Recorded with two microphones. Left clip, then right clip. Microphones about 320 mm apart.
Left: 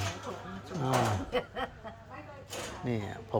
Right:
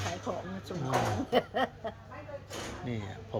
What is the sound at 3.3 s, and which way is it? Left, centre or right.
Music, centre.